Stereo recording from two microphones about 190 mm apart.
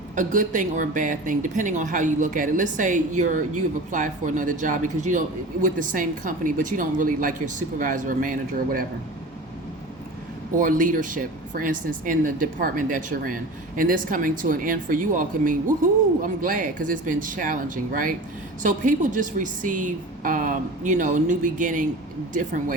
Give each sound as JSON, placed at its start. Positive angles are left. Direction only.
{"t": 0.2, "sound": "speech", "side_deg": -40}
{"t": 10.6, "sound": "speech", "side_deg": -45}